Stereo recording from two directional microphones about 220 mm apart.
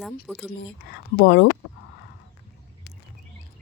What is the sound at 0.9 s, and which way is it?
Speech, 50° left (ahead or behind).